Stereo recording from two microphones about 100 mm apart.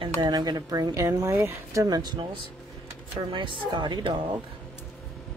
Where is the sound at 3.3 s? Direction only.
55° right (ahead or behind).